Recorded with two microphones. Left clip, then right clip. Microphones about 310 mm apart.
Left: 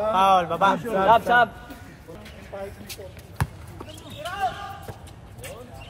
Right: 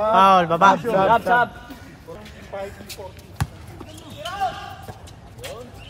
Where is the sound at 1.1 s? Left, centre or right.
Centre.